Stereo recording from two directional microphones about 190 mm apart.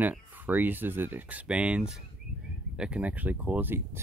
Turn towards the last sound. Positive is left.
turn(degrees=-10)  # may be behind; listen again after turning